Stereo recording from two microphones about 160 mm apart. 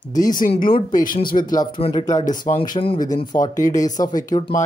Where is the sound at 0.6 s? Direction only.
65° left (ahead or behind).